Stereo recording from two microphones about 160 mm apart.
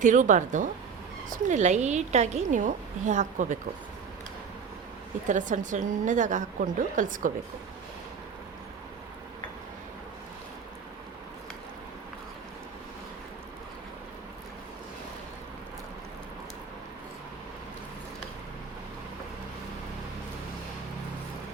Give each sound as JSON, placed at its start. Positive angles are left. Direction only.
{"t": 0.0, "sound": "a woman's voice", "side_deg": -50}
{"t": 5.3, "sound": "a woman's voice", "side_deg": -50}